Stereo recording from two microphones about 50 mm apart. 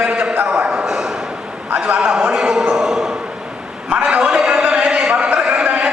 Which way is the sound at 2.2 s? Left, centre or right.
Centre.